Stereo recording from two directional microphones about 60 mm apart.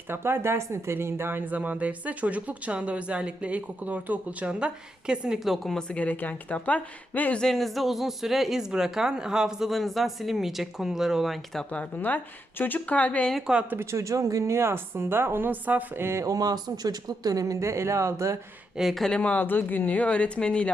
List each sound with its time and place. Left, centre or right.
0.1 s speech: right; by 5.4 s centre
5.4 s speech: centre
5.7 s speech: left
7.3 s speech: centre
11.7 s speech: left
13.7 s a woman's voice: right
16.0 s a woman's voice: right
16.2 s speech: right
18.8 s speech: centre
19.0 s speech: centre